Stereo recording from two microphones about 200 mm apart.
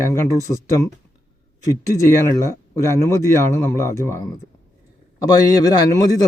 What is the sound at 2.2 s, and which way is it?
A man's voice, 15° left (ahead or behind).